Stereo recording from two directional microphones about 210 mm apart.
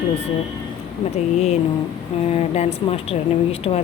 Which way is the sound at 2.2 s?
30° left (ahead or behind).